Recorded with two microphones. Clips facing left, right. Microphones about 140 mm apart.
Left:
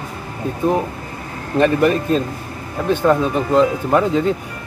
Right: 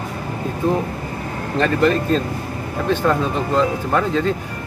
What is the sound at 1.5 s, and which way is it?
Speech, 15° left (ahead or behind).